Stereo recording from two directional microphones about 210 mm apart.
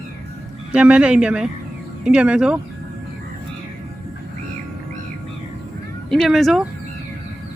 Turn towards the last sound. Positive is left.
turn(degrees=0)  # may be behind; listen again after turning